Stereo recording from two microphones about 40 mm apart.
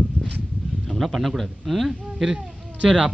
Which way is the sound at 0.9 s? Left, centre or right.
Centre.